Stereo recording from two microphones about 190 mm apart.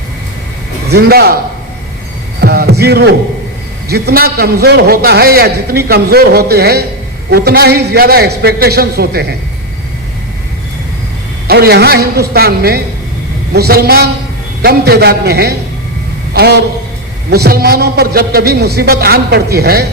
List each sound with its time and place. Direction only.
0.9 s a man's voice: 55° right (ahead or behind)
2.4 s a man's voice: 55° right (ahead or behind)
11.4 s a man's voice: 55° right (ahead or behind)